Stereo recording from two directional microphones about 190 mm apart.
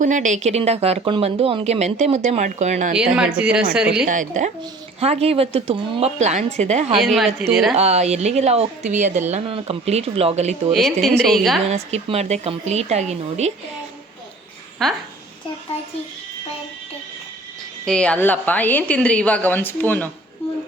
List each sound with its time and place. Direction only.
0.0 s speech: 40° right (ahead or behind)
3.2 s speech: 5° right (ahead or behind)
4.0 s speech: 45° right (ahead or behind)
7.0 s speech: centre (ahead or behind)
7.8 s speech: 35° right (ahead or behind)
10.7 s speech: centre (ahead or behind)
11.7 s speech: 35° right (ahead or behind)
14.8 s speech: centre (ahead or behind)
15.7 s speech: 30° left (ahead or behind)
17.8 s a woman's voice: 5° left (ahead or behind)